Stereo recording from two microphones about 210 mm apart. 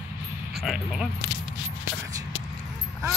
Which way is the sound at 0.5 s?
Centre (ahead or behind).